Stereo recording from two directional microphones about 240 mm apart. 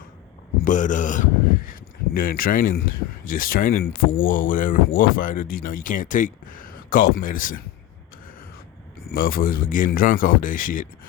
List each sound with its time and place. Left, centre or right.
0.6 s speech: left
9.0 s speech: left